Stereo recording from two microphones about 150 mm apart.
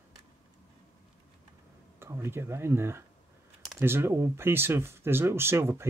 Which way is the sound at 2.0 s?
15° right (ahead or behind).